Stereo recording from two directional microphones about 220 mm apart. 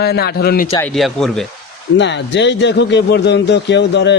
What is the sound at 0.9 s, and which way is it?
Speech, centre (ahead or behind).